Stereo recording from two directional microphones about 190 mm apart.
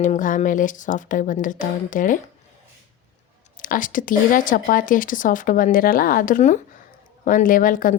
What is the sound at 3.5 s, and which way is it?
Speech, 45° left (ahead or behind).